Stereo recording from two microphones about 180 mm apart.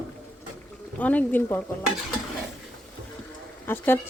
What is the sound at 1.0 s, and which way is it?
Speech, 10° left (ahead or behind).